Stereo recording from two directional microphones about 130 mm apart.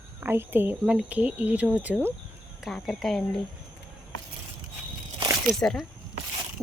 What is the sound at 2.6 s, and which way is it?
Speech, centre (ahead or behind).